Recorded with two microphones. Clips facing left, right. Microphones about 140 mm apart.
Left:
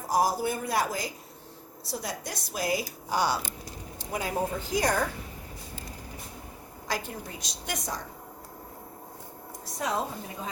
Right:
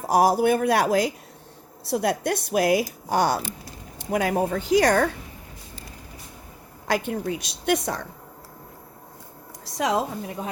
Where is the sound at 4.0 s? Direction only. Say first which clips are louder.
Right 7 dB; 70° right (ahead or behind).